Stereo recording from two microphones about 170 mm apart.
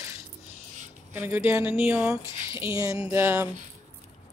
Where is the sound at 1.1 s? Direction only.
10° right (ahead or behind).